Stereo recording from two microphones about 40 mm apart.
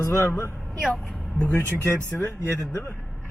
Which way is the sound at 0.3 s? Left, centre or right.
Left.